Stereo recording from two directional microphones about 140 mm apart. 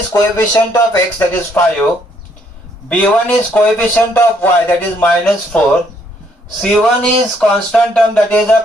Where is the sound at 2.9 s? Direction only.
10° left (ahead or behind).